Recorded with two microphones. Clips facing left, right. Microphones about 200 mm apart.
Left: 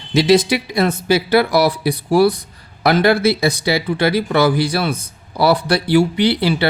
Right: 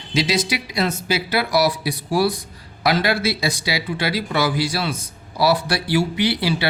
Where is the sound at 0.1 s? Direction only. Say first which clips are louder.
Left 8 dB; 60° left (ahead or behind).